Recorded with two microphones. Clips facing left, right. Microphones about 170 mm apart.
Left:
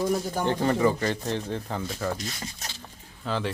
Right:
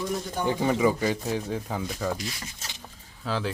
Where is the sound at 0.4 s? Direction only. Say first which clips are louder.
Right 1 dB; 10° right (ahead or behind).